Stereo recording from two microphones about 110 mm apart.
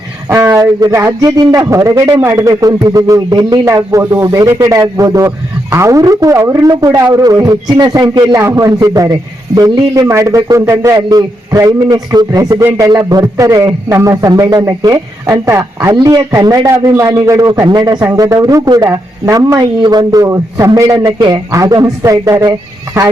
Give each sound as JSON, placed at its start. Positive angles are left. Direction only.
{"t": 0.3, "sound": "a sound", "side_deg": -15}
{"t": 0.5, "sound": "a man's voice", "side_deg": -30}
{"t": 8.4, "sound": "a man's voice", "side_deg": -30}